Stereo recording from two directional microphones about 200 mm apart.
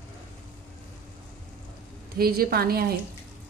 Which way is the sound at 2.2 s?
50° right (ahead or behind).